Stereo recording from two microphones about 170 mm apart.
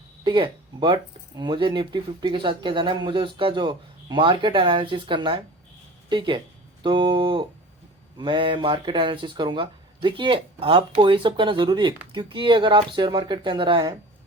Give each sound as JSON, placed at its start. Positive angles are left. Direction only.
{"t": 0.3, "sound": "speech", "side_deg": -25}